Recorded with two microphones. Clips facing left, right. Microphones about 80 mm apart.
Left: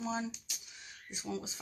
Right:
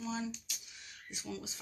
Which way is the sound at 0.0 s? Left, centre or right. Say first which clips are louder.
Left 2 dB; left.